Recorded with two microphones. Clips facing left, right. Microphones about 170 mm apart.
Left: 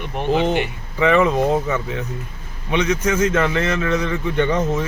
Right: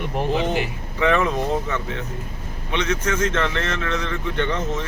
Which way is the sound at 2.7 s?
10° left (ahead or behind).